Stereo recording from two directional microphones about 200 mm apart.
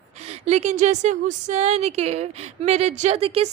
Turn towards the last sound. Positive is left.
turn(degrees=-30)  # may be behind; listen again after turning